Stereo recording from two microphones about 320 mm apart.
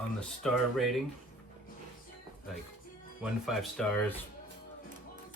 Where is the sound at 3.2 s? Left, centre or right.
Centre.